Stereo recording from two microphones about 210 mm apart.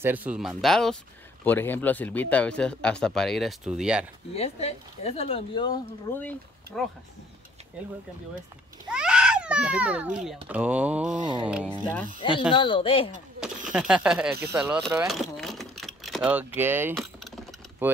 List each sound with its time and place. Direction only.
0.0 s speech: 10° right (ahead or behind)
4.3 s speech: 30° left (ahead or behind)
6.1 s speech: 5° left (ahead or behind)
8.8 s a sound: 5° right (ahead or behind)
10.5 s speech: 5° right (ahead or behind)
11.1 s a sound: 20° right (ahead or behind)
11.4 s speech: 5° right (ahead or behind)
12.2 s speech: 25° left (ahead or behind)
13.7 s speech: 5° right (ahead or behind)
16.9 s vehicle: centre (ahead or behind)
17.8 s speech: 10° right (ahead or behind)